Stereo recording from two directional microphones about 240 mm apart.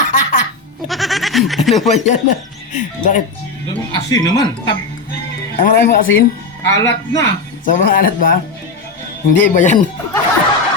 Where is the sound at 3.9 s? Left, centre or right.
Centre.